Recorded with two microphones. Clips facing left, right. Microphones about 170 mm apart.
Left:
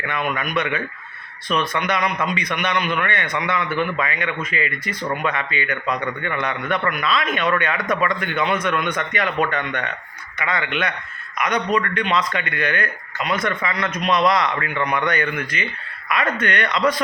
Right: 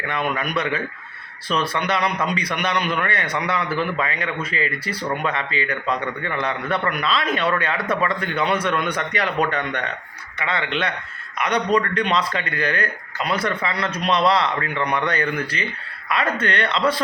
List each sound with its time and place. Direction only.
0.1 s a man's voice: 35° right (ahead or behind)